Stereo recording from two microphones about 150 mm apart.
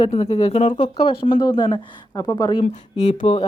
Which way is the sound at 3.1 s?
45° left (ahead or behind).